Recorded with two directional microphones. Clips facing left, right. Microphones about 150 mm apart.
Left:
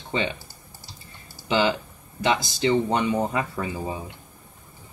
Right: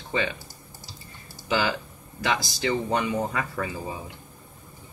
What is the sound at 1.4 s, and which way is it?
Speech, 25° left (ahead or behind).